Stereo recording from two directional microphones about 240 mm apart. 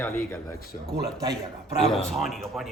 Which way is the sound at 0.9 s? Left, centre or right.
Centre.